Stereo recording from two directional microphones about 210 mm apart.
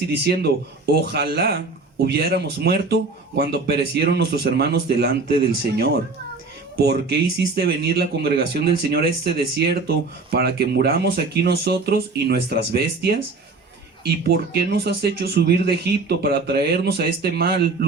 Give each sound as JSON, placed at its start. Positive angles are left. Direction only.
{"t": 0.1, "sound": "speech", "side_deg": -50}